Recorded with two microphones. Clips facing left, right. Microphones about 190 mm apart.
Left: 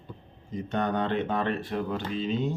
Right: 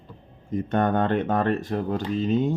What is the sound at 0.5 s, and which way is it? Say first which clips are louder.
Speech: right 6 dB; 55° right (ahead or behind).